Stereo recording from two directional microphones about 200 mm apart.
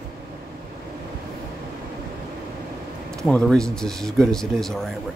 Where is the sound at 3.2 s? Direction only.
5° left (ahead or behind).